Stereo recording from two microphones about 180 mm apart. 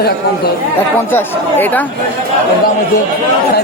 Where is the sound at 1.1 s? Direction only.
10° left (ahead or behind).